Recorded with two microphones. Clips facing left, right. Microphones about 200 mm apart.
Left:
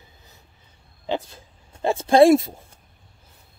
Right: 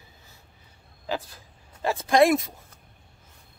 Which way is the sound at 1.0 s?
25° left (ahead or behind).